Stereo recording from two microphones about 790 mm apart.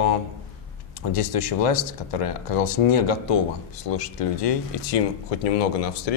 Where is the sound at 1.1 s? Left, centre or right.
Left.